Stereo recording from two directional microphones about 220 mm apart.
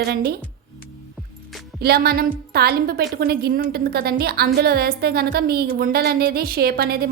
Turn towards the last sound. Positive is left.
turn(degrees=-45)  # may be behind; listen again after turning